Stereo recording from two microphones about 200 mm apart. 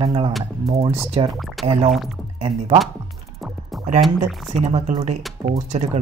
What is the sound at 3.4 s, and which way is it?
Music, centre (ahead or behind).